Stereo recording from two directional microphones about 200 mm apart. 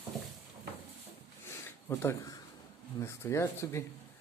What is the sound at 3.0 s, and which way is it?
Speech, 15° left (ahead or behind).